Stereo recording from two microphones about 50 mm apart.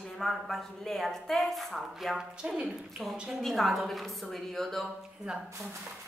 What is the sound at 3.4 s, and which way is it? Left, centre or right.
A woman's voice, centre.